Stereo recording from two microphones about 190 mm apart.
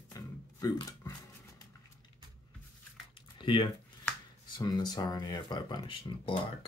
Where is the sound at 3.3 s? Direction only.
25° left (ahead or behind).